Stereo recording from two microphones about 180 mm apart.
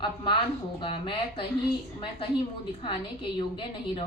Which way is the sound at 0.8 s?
30° left (ahead or behind).